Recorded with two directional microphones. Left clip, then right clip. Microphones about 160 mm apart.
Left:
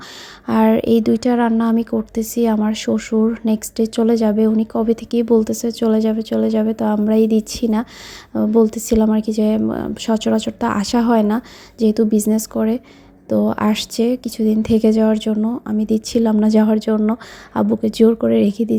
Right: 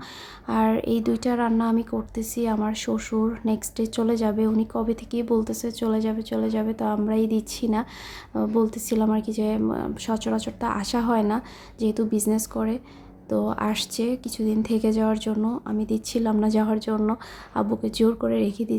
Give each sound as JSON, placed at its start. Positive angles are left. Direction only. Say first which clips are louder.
{"t": 0.4, "sound": "speech", "louder": "left 8 dB", "side_deg": 35}